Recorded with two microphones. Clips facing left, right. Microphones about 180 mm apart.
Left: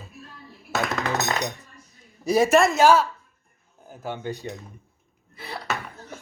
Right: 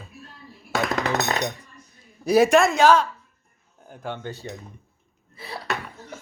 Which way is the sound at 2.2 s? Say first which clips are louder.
Right 2 dB; centre (ahead or behind).